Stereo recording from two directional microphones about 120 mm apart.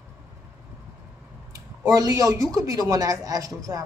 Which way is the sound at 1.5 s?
30° right (ahead or behind).